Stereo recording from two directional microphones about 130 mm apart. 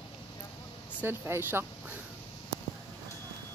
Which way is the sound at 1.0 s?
15° right (ahead or behind).